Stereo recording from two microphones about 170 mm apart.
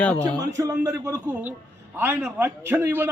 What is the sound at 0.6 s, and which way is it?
A man's voice, 20° right (ahead or behind).